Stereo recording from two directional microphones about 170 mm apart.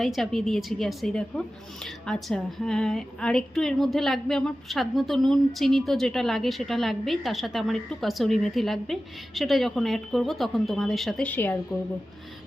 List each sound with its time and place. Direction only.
0.0 s a woman's voice: centre (ahead or behind)